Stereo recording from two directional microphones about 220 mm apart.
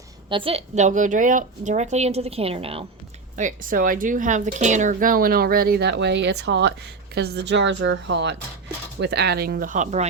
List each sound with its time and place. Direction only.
0.3 s a woman's voice: 25° right (ahead or behind)
3.3 s speech: 35° right (ahead or behind)